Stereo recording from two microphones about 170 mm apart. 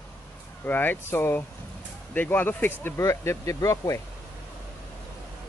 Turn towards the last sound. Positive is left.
turn(degrees=20)  # may be behind; listen again after turning